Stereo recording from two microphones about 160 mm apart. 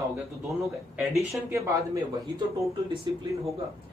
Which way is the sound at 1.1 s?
20° right (ahead or behind).